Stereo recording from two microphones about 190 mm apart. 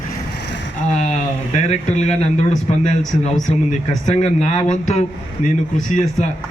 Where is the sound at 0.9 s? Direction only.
35° left (ahead or behind).